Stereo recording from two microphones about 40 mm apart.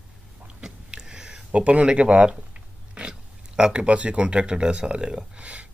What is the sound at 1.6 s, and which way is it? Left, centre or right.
Speech, right.